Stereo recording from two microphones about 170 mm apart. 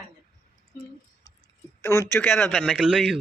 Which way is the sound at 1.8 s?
15° left (ahead or behind).